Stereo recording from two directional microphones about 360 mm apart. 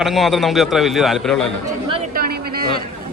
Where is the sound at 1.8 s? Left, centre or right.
Centre.